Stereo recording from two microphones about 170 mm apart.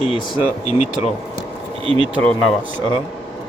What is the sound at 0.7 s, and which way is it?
Speech, 40° left (ahead or behind).